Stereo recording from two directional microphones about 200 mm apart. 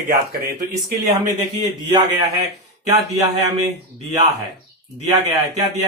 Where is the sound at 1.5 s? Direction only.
20° right (ahead or behind).